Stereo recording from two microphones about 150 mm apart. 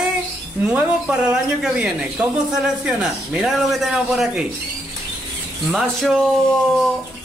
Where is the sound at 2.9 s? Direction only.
5° right (ahead or behind).